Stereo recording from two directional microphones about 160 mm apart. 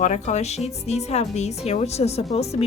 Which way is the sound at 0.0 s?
50° left (ahead or behind).